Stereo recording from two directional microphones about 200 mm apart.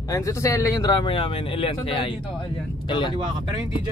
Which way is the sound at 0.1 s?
15° left (ahead or behind).